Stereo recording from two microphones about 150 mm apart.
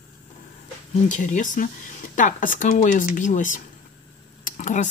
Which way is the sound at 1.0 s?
55° left (ahead or behind).